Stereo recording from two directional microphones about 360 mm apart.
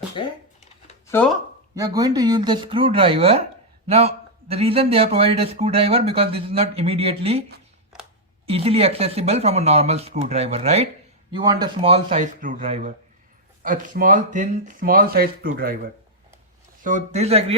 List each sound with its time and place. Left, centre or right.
0.2 s speech: centre
1.7 s a man's voice: centre
8.4 s a man's voice: centre